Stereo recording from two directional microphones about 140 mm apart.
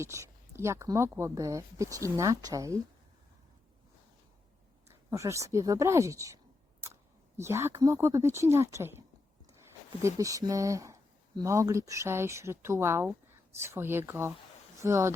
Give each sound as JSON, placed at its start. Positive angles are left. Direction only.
{"t": 0.0, "sound": "speech", "side_deg": -20}
{"t": 4.9, "sound": "speech", "side_deg": -20}